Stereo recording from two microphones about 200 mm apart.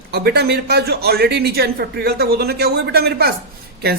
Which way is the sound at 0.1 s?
55° right (ahead or behind).